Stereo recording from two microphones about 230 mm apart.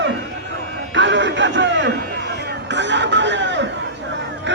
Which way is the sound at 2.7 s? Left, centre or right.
Right.